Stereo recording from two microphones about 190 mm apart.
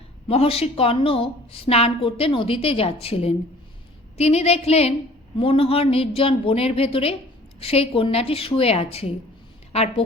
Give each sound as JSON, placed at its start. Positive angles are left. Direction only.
{"t": 0.3, "sound": "a woman's voice", "side_deg": 30}